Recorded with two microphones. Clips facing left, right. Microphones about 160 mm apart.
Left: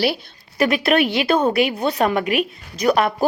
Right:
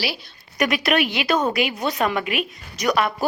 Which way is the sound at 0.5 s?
30° left (ahead or behind).